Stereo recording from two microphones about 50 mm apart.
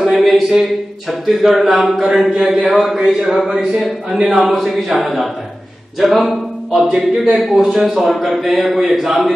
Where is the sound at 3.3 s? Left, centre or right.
Centre.